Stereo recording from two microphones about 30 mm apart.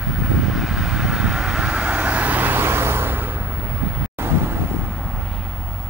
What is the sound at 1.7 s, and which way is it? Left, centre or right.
Vehicle, right.